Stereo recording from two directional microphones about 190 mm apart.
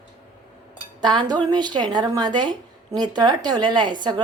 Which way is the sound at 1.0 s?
25° right (ahead or behind).